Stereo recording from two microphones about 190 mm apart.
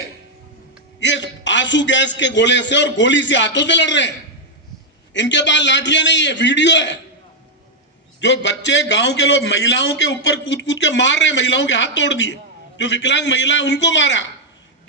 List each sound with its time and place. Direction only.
0.9 s a man's voice: 70° left (ahead or behind)
5.1 s a man's voice: 70° left (ahead or behind)
8.2 s a man's voice: 65° left (ahead or behind)